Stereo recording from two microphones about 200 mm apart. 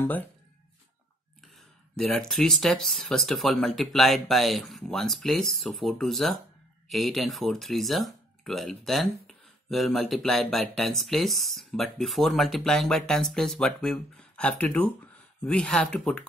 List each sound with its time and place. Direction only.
0.0 s speech: 10° left (ahead or behind)
2.0 s speech: centre (ahead or behind)